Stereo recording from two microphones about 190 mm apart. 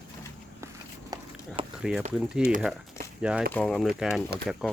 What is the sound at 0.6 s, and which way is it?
Walk, 15° right (ahead or behind).